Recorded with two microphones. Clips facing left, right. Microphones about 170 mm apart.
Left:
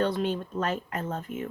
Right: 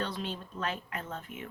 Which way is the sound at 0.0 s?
50° left (ahead or behind).